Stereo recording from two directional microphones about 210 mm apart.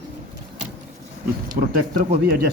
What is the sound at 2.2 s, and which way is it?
Speech, 50° right (ahead or behind).